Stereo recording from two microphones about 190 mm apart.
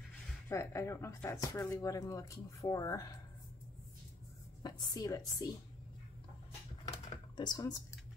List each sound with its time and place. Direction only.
0.5 s speech: 15° left (ahead or behind)
4.6 s a woman's voice: 20° left (ahead or behind)
6.9 s typing: 25° left (ahead or behind)